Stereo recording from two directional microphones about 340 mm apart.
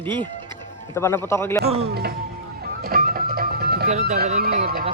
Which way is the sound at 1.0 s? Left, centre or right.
Centre.